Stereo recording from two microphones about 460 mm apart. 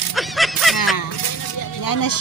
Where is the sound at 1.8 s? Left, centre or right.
Left.